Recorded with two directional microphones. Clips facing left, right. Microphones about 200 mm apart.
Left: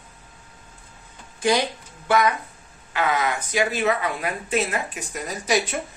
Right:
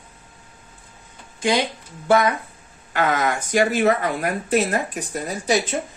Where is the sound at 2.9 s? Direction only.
45° right (ahead or behind).